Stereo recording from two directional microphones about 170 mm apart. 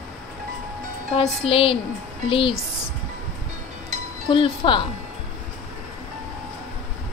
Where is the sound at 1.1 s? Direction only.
35° left (ahead or behind).